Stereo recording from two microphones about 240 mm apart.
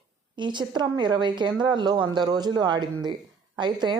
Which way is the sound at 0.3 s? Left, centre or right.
Centre.